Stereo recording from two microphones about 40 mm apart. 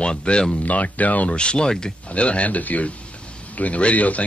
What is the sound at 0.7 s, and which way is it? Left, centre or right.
Speech, left.